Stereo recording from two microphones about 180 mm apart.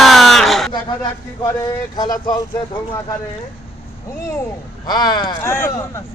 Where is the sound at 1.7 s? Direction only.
20° left (ahead or behind).